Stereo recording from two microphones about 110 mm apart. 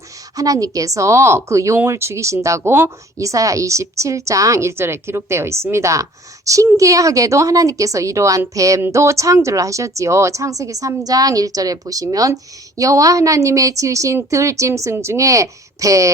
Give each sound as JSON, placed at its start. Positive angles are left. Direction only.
{"t": 0.3, "sound": "a woman's voice", "side_deg": -30}